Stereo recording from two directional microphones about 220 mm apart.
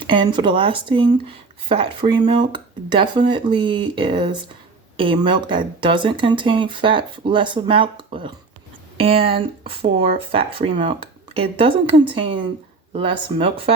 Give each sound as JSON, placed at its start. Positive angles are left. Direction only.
{"t": 0.0, "sound": "speech", "side_deg": -20}